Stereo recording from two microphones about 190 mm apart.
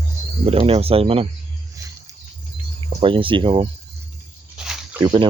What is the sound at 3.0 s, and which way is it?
Speech, 25° right (ahead or behind).